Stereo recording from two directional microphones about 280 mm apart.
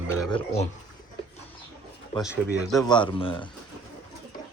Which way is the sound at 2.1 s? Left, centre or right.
Centre.